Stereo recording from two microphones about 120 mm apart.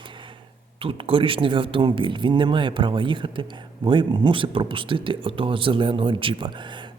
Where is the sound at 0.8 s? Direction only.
50° right (ahead or behind).